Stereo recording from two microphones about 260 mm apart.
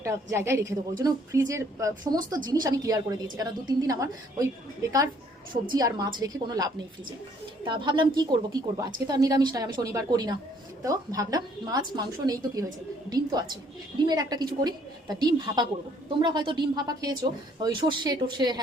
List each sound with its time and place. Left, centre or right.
0.0 s a woman's voice: centre